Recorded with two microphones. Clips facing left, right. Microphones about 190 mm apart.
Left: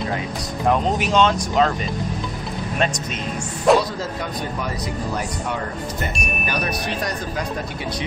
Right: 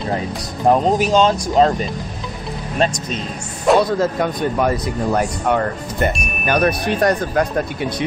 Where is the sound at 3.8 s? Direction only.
55° right (ahead or behind).